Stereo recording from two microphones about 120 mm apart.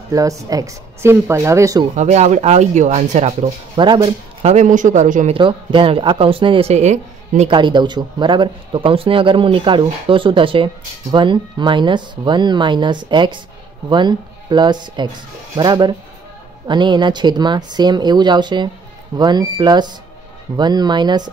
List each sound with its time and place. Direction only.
0.1 s speech: 30° right (ahead or behind)
2.0 s speech: 70° right (ahead or behind)
3.7 s speech: 40° right (ahead or behind)
4.4 s a man's voice: 65° right (ahead or behind); by 5.3 s 90° right
5.3 s speech: 45° right (ahead or behind)
6.7 s a woman's voice: 70° right (ahead or behind)
7.4 s speech: 40° right (ahead or behind)